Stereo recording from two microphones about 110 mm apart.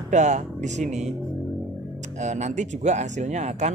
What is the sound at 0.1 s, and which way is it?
Speech, 90° right.